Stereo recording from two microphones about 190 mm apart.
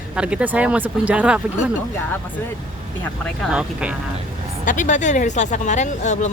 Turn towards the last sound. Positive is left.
turn(degrees=40)  # may be behind; listen again after turning